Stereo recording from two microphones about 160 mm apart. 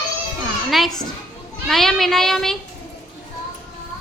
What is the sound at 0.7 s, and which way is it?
A child's voice, centre (ahead or behind).